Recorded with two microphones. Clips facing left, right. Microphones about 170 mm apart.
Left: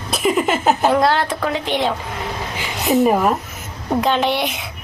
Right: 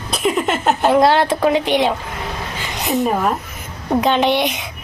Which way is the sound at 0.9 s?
20° right (ahead or behind).